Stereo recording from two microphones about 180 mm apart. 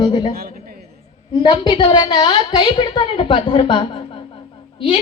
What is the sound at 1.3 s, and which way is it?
A woman's voice, 25° left (ahead or behind).